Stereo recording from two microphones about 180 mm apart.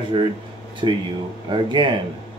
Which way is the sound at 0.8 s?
25° right (ahead or behind).